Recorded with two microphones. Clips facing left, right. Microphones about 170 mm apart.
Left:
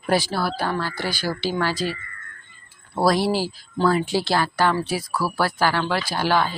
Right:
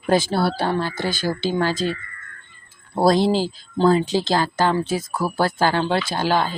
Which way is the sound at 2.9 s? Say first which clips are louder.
Right 3 dB; 25° right (ahead or behind).